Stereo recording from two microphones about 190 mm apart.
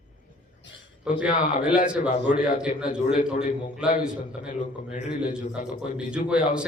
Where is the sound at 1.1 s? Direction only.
5° right (ahead or behind).